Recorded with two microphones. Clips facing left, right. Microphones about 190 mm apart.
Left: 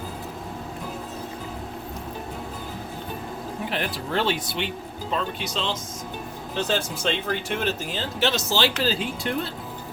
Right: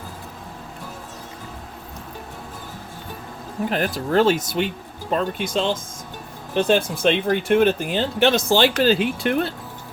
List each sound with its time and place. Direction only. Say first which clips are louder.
3.7 s speech: right 7 dB; 45° right (ahead or behind); by 9.5 s 60° right (ahead or behind)